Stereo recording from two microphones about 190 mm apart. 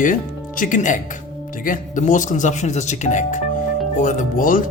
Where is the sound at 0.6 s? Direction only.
40° left (ahead or behind).